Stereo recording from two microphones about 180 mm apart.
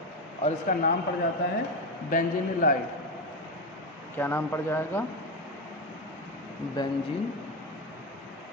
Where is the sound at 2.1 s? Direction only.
50° left (ahead or behind).